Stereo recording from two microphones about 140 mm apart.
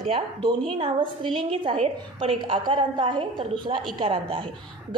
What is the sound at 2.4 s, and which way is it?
A woman's voice, 35° right (ahead or behind).